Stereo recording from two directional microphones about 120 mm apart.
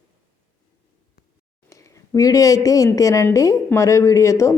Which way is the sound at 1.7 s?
25° left (ahead or behind).